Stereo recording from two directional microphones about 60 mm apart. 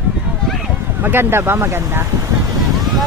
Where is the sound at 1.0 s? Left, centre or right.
Right.